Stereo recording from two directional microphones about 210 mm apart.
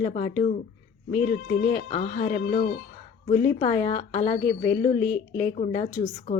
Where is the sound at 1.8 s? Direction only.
30° left (ahead or behind).